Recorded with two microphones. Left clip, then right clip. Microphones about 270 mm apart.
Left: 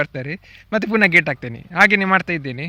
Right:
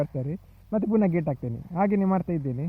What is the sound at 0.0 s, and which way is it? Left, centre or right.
A man's voice, left.